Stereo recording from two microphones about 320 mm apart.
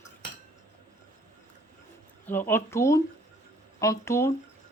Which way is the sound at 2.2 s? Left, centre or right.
Centre.